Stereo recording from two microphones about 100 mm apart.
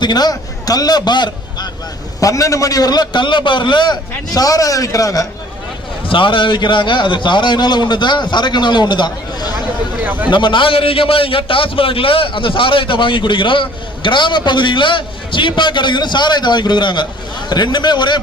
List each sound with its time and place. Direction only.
0.0 s a man's voice: 45° left (ahead or behind)
2.2 s a man's voice: 35° left (ahead or behind)
6.1 s a man's voice: 55° left (ahead or behind)
10.0 s a man's voice: 15° right (ahead or behind)
10.2 s a man's voice: 50° left (ahead or behind)